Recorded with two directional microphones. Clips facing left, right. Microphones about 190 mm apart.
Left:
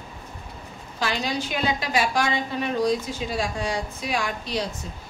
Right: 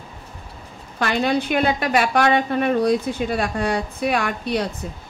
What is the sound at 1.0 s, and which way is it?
A woman's voice, 60° right (ahead or behind).